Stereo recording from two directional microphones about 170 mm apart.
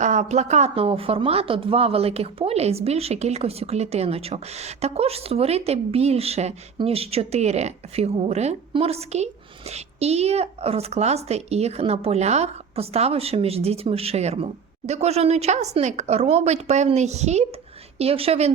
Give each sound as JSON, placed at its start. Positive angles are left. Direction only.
{"t": 0.0, "sound": "speech", "side_deg": -45}